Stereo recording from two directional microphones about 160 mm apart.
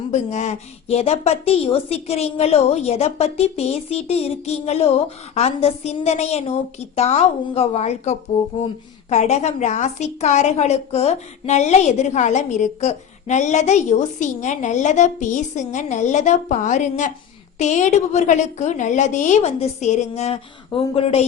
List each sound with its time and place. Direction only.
0.1 s a woman's voice: 45° left (ahead or behind)